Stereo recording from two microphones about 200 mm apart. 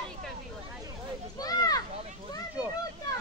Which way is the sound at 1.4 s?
20° left (ahead or behind).